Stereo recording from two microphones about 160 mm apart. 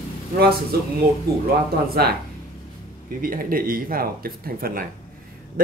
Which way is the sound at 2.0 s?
75° right (ahead or behind).